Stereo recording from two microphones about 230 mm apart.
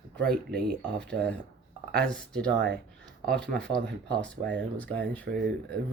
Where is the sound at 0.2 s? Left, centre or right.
Right.